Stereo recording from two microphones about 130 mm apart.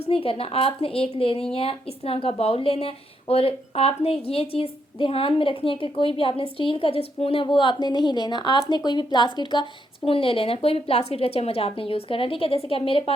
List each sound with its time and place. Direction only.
0.0 s a woman's voice: 45° left (ahead or behind)